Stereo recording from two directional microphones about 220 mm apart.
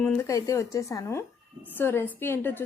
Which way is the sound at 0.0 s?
10° left (ahead or behind).